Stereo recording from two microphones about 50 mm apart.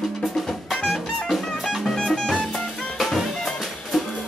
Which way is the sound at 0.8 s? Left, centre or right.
Centre.